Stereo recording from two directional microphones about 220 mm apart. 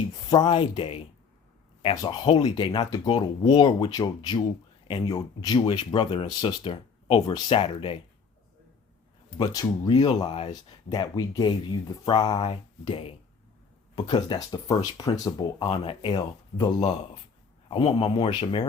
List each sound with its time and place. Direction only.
0.1 s speech: 20° left (ahead or behind)
9.4 s speech: 20° left (ahead or behind)